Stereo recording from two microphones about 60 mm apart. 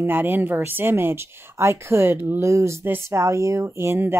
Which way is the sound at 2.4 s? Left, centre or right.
Right.